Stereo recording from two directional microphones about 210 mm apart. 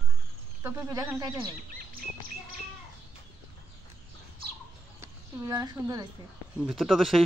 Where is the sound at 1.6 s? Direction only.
40° right (ahead or behind).